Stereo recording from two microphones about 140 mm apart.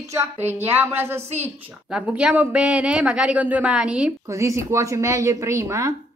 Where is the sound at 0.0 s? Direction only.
20° right (ahead or behind).